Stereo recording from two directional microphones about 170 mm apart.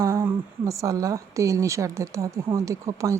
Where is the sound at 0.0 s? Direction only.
15° right (ahead or behind).